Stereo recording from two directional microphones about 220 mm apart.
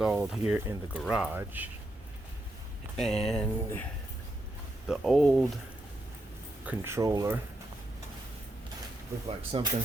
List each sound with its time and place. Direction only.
0.0 s speech: 5° right (ahead or behind)
3.0 s speech: centre (ahead or behind)
4.9 s speech: centre (ahead or behind)
6.7 s speech: 10° right (ahead or behind)
9.5 s speech: 25° right (ahead or behind)